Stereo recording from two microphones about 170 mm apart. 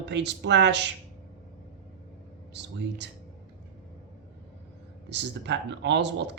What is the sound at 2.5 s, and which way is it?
Speech, 90° right.